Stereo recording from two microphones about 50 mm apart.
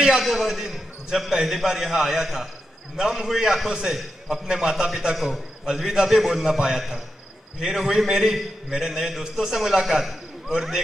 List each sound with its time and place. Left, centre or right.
0.0 s a man's voice: centre